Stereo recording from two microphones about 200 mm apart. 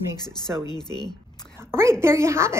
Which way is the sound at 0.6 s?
20° left (ahead or behind).